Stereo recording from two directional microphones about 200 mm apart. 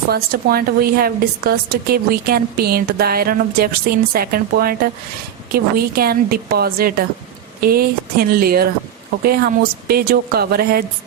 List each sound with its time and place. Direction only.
0.1 s a woman's voice: 50° right (ahead or behind)